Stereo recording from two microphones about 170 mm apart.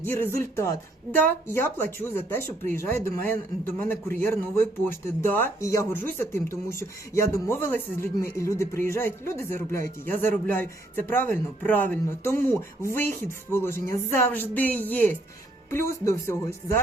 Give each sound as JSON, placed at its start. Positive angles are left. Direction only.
{"t": 0.0, "sound": "speech", "side_deg": 10}